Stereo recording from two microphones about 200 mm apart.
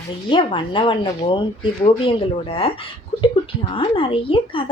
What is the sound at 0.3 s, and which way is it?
A woman's voice, 25° left (ahead or behind).